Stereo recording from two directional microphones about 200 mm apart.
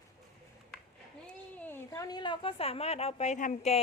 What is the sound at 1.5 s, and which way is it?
A woman's voice, 10° left (ahead or behind).